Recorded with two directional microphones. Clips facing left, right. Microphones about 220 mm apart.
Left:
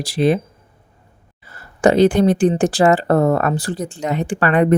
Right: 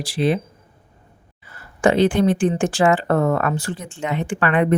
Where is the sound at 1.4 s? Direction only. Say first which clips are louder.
Left 3 dB; 40° left (ahead or behind).